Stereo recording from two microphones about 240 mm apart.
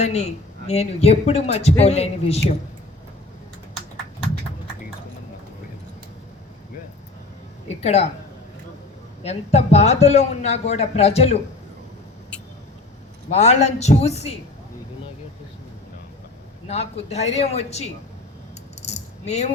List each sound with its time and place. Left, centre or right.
0.0 s a man's voice: left
7.8 s a man's voice: left
9.2 s a man's voice: left
13.3 s a man's voice: left
16.6 s a man's voice: left
18.8 s coin: left